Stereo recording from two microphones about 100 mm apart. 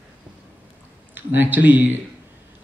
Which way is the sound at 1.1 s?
20° right (ahead or behind).